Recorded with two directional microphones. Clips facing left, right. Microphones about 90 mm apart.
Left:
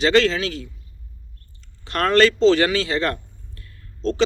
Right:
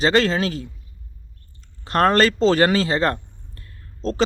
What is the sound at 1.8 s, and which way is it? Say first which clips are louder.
Speech: even; 35° right (ahead or behind).